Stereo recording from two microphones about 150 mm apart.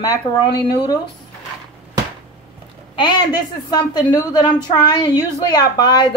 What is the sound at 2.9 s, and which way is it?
A woman's voice, 30° left (ahead or behind).